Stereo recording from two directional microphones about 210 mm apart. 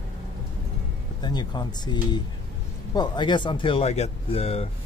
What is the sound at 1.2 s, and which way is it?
Speech, 20° left (ahead or behind).